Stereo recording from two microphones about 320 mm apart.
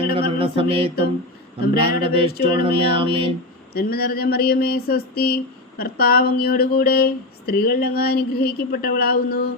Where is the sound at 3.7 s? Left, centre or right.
Left.